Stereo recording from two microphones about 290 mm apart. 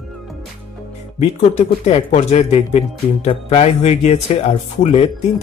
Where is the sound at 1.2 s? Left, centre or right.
Left.